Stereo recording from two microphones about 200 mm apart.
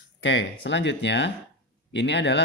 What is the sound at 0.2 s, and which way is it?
Speech, 65° left (ahead or behind).